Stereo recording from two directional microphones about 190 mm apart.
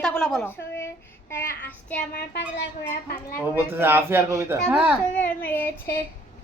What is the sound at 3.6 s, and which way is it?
Speech, 10° right (ahead or behind).